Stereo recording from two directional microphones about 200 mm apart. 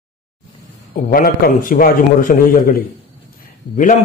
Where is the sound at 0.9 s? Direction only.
45° left (ahead or behind).